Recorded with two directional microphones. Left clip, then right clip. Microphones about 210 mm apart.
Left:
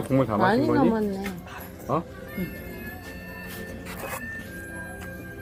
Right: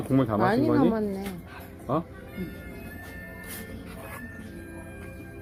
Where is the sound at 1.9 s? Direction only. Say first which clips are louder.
Left 1 dB; 40° right (ahead or behind).